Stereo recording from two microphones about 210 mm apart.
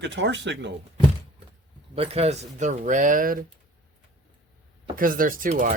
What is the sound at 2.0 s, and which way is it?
Speech, 30° right (ahead or behind).